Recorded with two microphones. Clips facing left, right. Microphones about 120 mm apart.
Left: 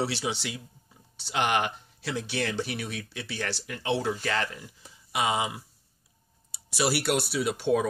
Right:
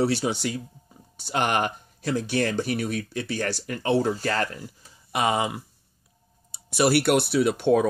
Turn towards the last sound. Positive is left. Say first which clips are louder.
# right 5 dB
turn(degrees=-50)  # may be behind; listen again after turning